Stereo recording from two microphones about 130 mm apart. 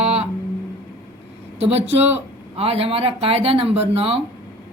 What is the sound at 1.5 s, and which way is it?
Speech, 55° right (ahead or behind).